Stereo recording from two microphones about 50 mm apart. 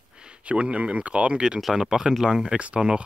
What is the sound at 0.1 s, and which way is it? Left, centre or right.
Speech, centre.